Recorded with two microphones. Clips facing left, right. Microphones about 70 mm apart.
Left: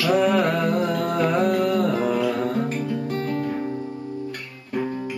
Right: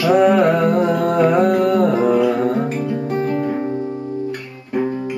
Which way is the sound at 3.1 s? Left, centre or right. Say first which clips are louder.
Right 6 dB; centre.